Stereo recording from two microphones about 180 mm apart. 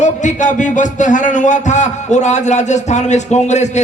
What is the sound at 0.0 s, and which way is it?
Speech, 40° left (ahead or behind).